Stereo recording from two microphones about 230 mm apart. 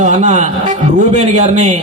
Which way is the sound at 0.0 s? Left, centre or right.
Right.